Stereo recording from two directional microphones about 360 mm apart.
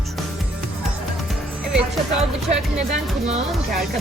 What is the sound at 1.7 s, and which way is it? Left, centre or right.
Speech, centre.